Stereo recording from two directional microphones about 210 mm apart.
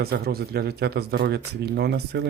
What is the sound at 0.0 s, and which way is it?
Speech, 50° right (ahead or behind).